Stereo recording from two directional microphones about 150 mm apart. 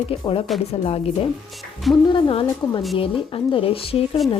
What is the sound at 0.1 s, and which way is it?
Speech, 35° left (ahead or behind).